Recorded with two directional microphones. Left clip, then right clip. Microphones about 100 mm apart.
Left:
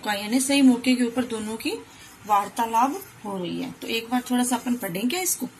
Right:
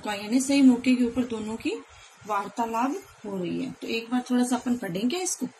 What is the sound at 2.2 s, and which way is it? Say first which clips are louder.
Speech: left 6 dB; 15° right (ahead or behind).